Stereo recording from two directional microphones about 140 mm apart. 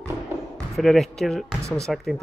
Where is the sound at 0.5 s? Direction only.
Centre (ahead or behind).